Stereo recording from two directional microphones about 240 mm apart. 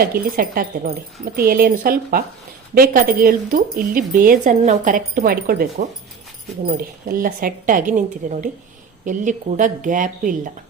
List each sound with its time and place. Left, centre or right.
0.0 s speech: right